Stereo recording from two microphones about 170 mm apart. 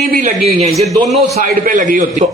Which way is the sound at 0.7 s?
Centre (ahead or behind).